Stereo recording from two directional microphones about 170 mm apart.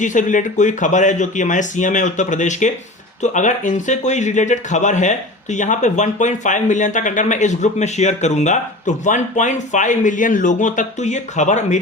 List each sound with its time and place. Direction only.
0.0 s speech: 45° left (ahead or behind)